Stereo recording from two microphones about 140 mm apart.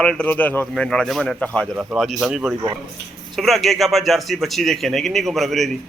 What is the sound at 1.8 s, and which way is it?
A man's voice, 5° right (ahead or behind).